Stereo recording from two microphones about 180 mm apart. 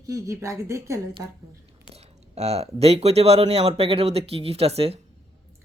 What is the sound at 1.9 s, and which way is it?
Speech, 35° right (ahead or behind).